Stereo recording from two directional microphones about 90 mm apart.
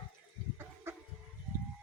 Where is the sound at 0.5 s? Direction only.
30° right (ahead or behind).